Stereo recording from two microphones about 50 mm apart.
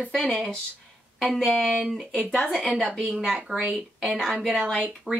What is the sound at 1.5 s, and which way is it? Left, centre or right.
Speech, centre.